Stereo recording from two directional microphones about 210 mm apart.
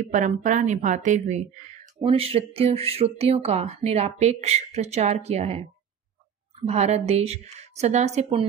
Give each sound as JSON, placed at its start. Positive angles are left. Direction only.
{"t": 0.0, "sound": "a woman's voice", "side_deg": -35}